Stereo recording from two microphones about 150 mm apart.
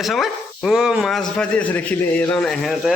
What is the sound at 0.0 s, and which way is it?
Speech, centre (ahead or behind).